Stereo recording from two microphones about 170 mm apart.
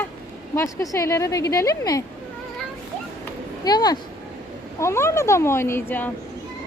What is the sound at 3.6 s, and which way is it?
Speech, 25° left (ahead or behind).